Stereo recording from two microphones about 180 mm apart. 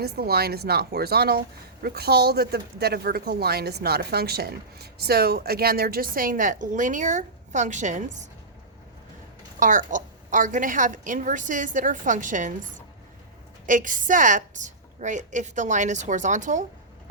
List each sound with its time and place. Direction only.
0.0 s speech: 60° right (ahead or behind); by 8.3 s 45° right (ahead or behind)
9.6 s a woman's voice: 45° right (ahead or behind)
13.7 s a woman's voice: 45° right (ahead or behind)